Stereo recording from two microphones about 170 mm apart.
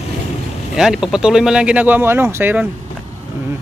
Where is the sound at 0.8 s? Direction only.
5° right (ahead or behind).